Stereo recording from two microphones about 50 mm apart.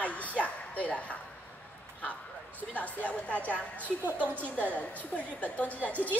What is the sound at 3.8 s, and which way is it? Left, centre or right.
Speech, right.